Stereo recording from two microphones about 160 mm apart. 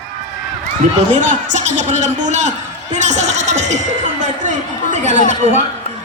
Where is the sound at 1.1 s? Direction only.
50° right (ahead or behind).